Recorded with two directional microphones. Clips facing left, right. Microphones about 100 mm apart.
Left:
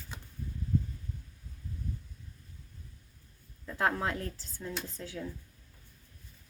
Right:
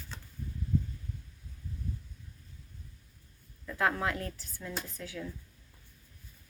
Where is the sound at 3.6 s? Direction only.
35° left (ahead or behind).